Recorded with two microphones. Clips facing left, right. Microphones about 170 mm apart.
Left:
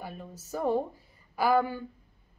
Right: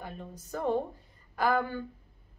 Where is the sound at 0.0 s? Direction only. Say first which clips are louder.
Left 1 dB; 5° left (ahead or behind).